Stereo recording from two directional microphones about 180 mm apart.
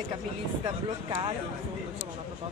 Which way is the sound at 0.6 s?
25° right (ahead or behind).